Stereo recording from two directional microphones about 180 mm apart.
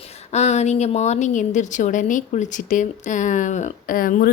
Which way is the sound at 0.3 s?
40° left (ahead or behind).